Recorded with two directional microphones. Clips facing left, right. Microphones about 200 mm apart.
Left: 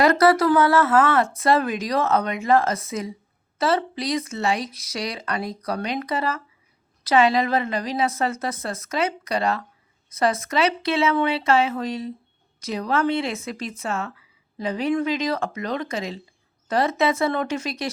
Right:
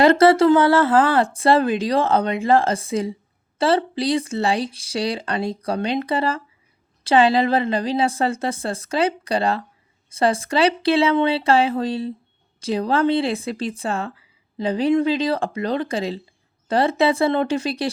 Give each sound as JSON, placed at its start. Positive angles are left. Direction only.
{"t": 0.0, "sound": "speech", "side_deg": -25}